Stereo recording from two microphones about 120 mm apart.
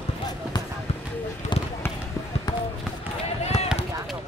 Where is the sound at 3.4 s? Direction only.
65° left (ahead or behind).